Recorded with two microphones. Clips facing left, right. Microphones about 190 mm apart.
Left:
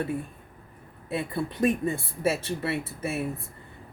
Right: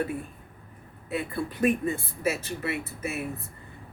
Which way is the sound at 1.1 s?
25° left (ahead or behind).